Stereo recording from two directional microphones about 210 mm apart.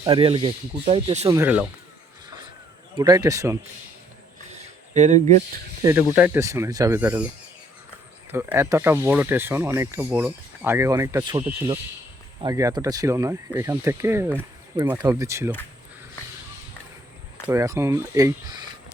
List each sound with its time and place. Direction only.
0.0 s speech: 25° right (ahead or behind)
1.3 s speech: 10° right (ahead or behind)
3.0 s speech: 15° right (ahead or behind)
4.4 s a sound: 30° right (ahead or behind)
5.8 s speech: 10° right (ahead or behind)
8.3 s speech: 10° right (ahead or behind)
17.5 s speech: 15° right (ahead or behind)